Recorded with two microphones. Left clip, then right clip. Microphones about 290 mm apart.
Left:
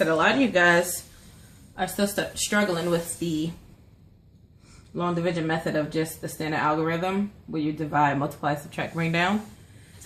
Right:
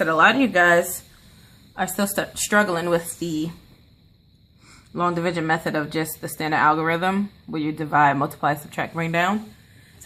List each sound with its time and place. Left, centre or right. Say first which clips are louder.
0.0 s a woman's voice: right 4 dB; centre
4.9 s speech: right 4 dB; right